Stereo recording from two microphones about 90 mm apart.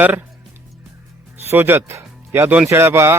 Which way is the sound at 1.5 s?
25° right (ahead or behind).